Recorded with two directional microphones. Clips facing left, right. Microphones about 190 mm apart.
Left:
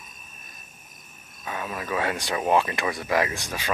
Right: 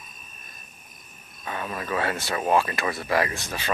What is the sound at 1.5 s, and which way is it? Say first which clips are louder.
Speech: even; 10° left (ahead or behind).